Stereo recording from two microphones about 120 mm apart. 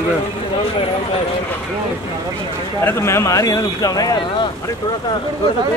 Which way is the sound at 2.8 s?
20° left (ahead or behind).